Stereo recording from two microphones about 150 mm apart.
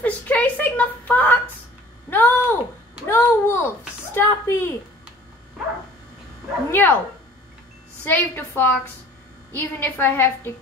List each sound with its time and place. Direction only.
0.0 s a sound: 10° left (ahead or behind)
6.7 s a woman's voice: 15° left (ahead or behind)
8.0 s a woman's voice: 10° left (ahead or behind)